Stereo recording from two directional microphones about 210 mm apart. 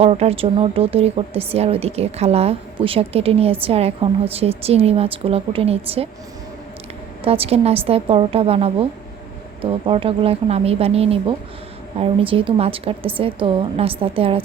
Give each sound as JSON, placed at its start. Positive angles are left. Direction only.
{"t": 0.0, "sound": "a woman's voice", "side_deg": -30}
{"t": 7.3, "sound": "a woman's voice", "side_deg": -30}